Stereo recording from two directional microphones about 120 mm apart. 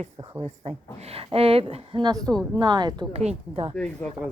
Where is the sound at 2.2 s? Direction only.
5° left (ahead or behind).